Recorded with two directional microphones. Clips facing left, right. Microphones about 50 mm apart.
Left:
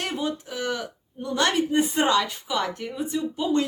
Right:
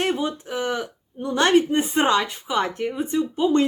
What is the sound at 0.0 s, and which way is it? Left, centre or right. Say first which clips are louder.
Speech: right 5 dB; right.